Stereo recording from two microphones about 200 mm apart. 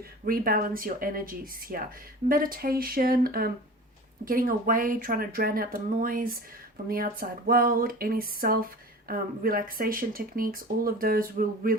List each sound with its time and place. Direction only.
0.3 s speech: 45° right (ahead or behind)